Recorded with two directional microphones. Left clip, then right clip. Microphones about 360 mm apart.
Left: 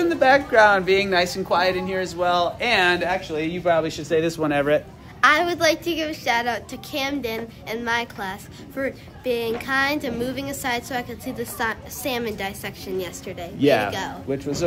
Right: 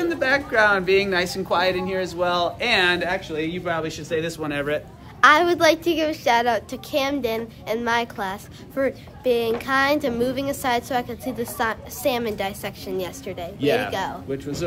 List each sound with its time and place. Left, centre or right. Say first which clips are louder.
0.0 s speech: left 4 dB; centre
5.2 s a woman's voice: right 2 dB; centre
13.6 s speech: left 3 dB; centre